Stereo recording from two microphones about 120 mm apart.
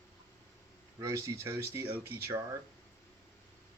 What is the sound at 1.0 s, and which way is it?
Speech, 30° right (ahead or behind).